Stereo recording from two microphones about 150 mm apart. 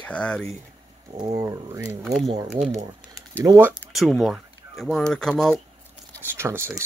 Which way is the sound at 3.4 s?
20° right (ahead or behind).